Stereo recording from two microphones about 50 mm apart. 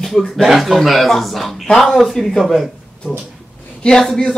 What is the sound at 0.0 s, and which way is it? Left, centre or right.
A man's voice, centre.